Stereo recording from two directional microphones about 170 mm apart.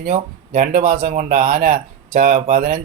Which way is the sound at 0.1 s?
50° right (ahead or behind).